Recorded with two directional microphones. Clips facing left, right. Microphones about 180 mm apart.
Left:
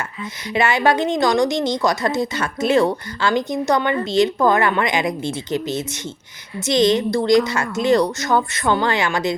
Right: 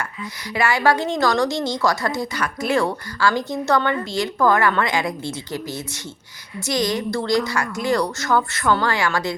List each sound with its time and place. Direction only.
0.5 s a woman's voice: 20° left (ahead or behind)